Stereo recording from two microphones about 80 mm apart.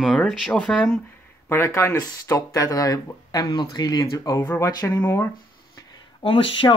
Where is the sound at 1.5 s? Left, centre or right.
Left.